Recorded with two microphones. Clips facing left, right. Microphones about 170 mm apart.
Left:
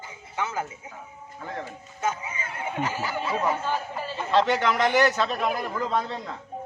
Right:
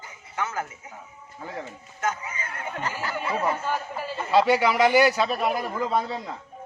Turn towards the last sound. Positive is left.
turn(degrees=-5)  # may be behind; listen again after turning